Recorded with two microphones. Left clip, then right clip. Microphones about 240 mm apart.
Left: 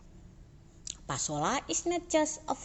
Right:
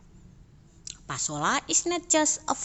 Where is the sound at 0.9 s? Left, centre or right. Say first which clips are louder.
Right 2 dB; centre; by 2.6 s right.